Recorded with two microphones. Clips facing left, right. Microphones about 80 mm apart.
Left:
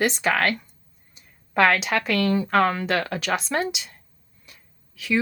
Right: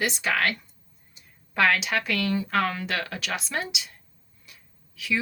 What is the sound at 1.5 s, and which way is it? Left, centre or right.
Speech, left.